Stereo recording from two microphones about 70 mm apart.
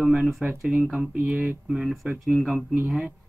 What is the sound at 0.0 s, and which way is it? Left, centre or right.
Speech, centre.